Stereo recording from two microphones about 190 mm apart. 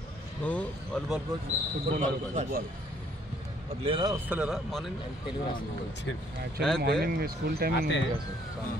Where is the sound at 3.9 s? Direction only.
25° right (ahead or behind).